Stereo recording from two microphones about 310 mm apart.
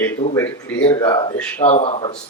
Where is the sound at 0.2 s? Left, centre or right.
Left.